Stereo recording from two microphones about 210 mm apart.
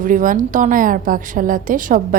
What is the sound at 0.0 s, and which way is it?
A woman's voice, 40° right (ahead or behind).